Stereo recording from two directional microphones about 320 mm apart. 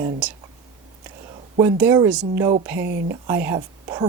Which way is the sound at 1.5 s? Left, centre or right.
Centre.